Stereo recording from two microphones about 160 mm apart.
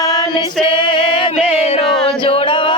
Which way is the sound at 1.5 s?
40° left (ahead or behind).